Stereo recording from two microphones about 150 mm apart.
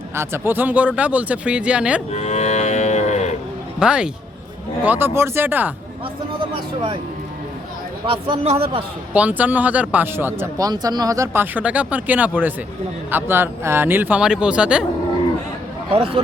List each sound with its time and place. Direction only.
0.2 s speech: 15° right (ahead or behind)
2.1 s livestock: 50° left (ahead or behind)
3.8 s speech: 5° right (ahead or behind)
8.0 s a man's voice: 35° right (ahead or behind)
9.1 s speech: 10° right (ahead or behind)
10.7 s speech: 25° right (ahead or behind)
11.5 s speech: 10° right (ahead or behind)
16.0 s a man's voice: 40° right (ahead or behind)